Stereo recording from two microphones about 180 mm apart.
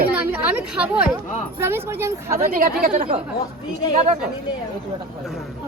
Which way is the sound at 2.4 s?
50° right (ahead or behind).